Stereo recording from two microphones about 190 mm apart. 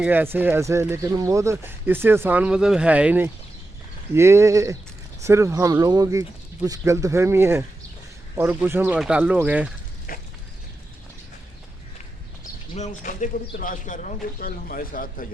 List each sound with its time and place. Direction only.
0.0 s speech: 10° right (ahead or behind)
10.1 s a sound: 50° left (ahead or behind)
12.7 s a man's voice: 40° left (ahead or behind)